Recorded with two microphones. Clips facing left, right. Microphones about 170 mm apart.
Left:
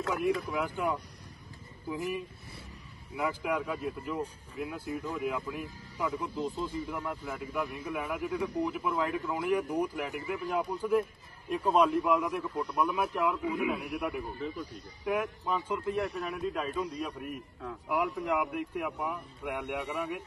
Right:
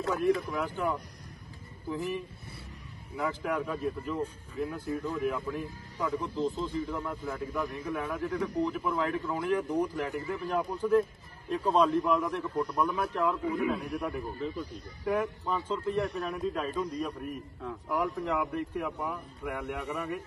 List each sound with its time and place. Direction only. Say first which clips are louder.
0.6 s a man's voice: even; 15° left (ahead or behind)